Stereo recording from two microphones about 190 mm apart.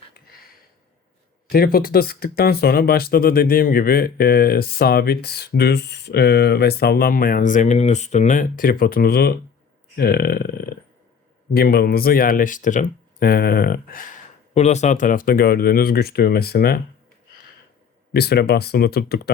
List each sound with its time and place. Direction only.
1.5 s speech: 55° left (ahead or behind)
14.5 s speech: 35° left (ahead or behind); by 16.8 s 55° left (ahead or behind)
18.1 s speech: 55° left (ahead or behind)